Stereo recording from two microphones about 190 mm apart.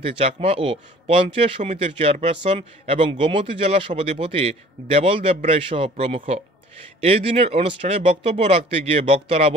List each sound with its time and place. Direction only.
0.4 s speech: 30° right (ahead or behind)